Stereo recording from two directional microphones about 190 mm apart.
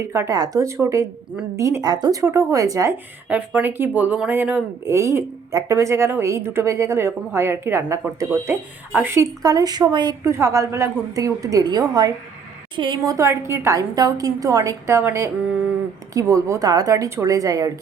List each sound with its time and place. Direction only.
0.0 s a woman's voice: 15° right (ahead or behind)
13.5 s speech: 15° right (ahead or behind)